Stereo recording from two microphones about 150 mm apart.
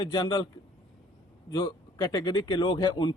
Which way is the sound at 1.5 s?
30° left (ahead or behind).